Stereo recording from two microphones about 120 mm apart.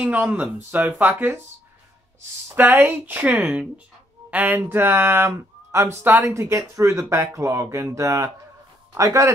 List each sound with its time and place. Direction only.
0.0 s speech: 10° right (ahead or behind)
2.5 s speech: 15° right (ahead or behind)